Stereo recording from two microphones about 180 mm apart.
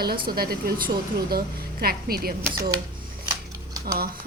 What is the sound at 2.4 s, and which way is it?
Speech, 10° right (ahead or behind).